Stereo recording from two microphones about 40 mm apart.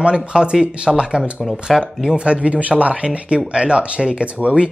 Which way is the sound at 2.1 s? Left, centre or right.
Right.